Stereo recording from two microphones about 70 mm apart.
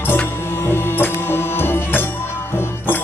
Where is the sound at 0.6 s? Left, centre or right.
Left.